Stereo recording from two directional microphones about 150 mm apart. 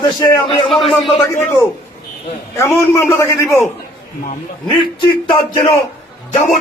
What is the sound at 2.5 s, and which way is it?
Speech, 15° left (ahead or behind).